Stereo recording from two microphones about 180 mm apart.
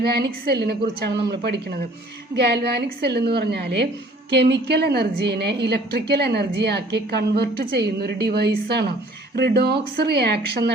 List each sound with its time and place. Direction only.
0.0 s a woman's voice: 60° right (ahead or behind)